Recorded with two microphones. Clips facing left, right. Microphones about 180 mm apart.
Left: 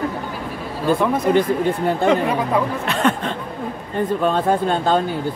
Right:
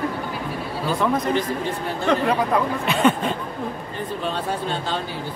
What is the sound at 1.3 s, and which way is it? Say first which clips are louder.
Speech: left 6 dB; 60° left (ahead or behind).